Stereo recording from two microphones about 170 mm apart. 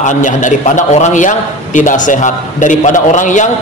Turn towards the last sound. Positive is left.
turn(degrees=45)  # may be behind; listen again after turning